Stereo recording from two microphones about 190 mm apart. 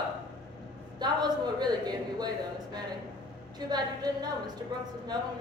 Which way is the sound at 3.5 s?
20° right (ahead or behind).